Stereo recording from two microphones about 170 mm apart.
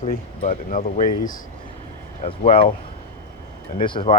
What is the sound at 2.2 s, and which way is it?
Speech, 35° left (ahead or behind).